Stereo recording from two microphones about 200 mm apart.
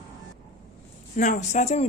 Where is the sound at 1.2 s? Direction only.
35° left (ahead or behind).